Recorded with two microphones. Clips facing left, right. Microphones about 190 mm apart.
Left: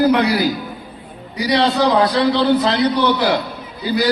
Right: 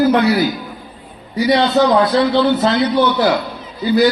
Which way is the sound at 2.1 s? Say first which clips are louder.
Right 2 dB; 35° left (ahead or behind).